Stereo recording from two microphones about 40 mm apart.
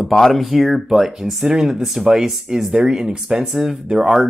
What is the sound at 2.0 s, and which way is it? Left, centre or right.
Speech, centre.